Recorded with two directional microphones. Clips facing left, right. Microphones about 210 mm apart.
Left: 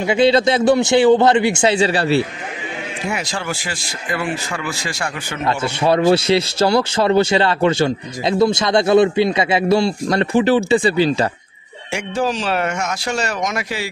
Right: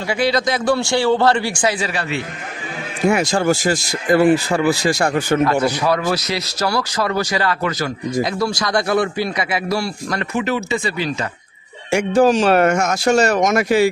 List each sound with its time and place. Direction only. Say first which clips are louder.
0.0 s speech: left 5 dB; 25° left (ahead or behind)
3.1 s speech: right 9 dB; 45° right (ahead or behind)
5.6 s speech: left 2 dB; 25° left (ahead or behind)
11.9 s speech: right 7 dB; 50° right (ahead or behind)